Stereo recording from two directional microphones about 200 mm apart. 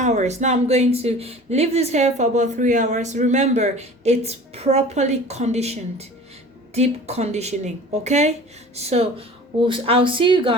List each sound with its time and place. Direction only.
0.0 s speech: 35° right (ahead or behind)